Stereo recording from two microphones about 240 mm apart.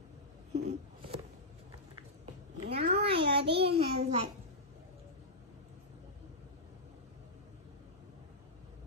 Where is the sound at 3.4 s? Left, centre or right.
Right.